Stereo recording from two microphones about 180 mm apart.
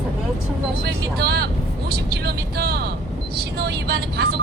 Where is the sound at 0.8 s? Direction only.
60° right (ahead or behind).